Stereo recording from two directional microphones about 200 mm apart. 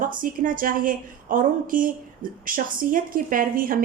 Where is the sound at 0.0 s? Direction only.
45° right (ahead or behind).